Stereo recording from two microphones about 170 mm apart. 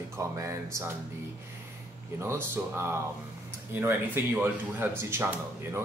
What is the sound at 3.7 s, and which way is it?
Speech, 10° right (ahead or behind).